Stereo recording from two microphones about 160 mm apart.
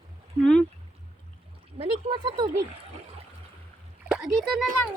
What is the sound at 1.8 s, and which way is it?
Speech, 30° right (ahead or behind).